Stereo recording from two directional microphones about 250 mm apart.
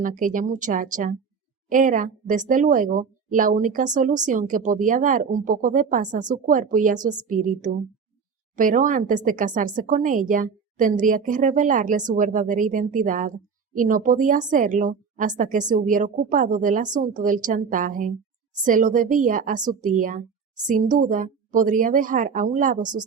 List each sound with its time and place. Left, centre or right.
0.0 s speech: right
22.8 s speech: centre